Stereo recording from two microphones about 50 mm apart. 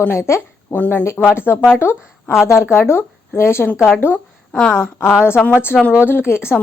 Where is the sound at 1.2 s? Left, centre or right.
Left.